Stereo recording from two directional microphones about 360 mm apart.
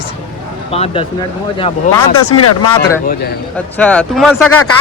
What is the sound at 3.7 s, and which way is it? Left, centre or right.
Speech, centre.